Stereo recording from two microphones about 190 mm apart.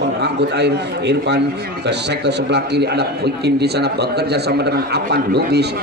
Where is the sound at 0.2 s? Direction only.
65° right (ahead or behind).